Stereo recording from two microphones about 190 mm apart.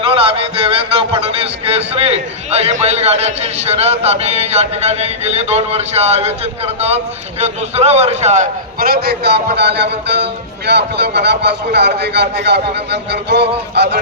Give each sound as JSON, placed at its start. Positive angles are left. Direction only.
{"t": 0.0, "sound": "a man's voice", "side_deg": -30}